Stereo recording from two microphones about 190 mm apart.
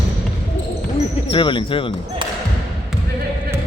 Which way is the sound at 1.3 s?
25° left (ahead or behind).